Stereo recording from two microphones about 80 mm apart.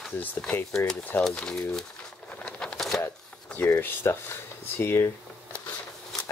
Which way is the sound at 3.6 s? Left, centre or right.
Left.